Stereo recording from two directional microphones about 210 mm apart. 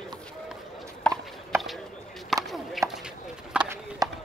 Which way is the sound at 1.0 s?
5° left (ahead or behind).